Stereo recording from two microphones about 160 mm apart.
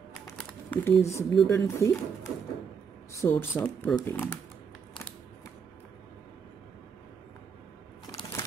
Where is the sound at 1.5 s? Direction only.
15° left (ahead or behind).